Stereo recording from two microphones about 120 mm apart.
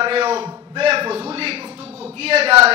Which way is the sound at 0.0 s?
55° right (ahead or behind).